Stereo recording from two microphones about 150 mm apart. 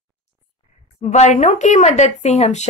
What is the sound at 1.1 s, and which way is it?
Speech, 50° left (ahead or behind).